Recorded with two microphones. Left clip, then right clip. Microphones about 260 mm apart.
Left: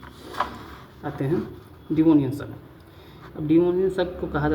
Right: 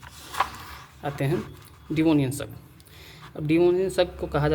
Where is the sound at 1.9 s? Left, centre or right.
Right.